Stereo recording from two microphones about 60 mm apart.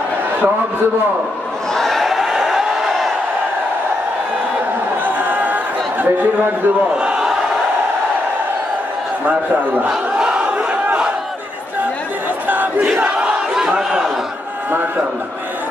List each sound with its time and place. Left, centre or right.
1.7 s crowd: centre
5.0 s a sound: right
7.2 s crowd: centre
10.2 s battle cry: centre
13.6 s battle cry: centre